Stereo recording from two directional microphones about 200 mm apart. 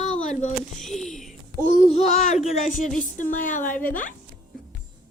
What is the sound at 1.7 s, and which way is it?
A child's voice, 30° left (ahead or behind).